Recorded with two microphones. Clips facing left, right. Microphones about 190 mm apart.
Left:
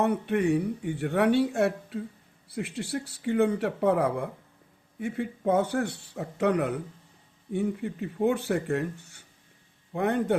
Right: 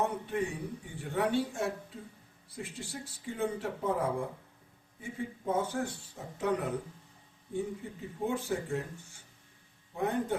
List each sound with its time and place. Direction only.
0.0 s speech: 70° left (ahead or behind)